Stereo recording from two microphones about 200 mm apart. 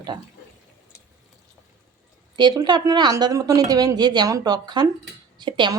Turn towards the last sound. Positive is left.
turn(degrees=-25)  # may be behind; listen again after turning